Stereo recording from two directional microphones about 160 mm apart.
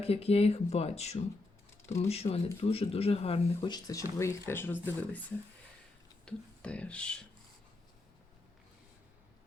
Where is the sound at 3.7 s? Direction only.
20° left (ahead or behind).